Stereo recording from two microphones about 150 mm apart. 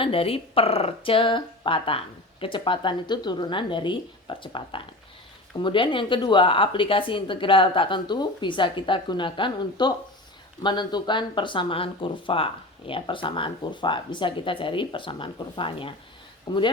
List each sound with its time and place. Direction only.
0.0 s a woman's voice: 40° left (ahead or behind)